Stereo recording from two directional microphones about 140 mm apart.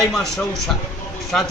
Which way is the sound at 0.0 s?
Centre (ahead or behind).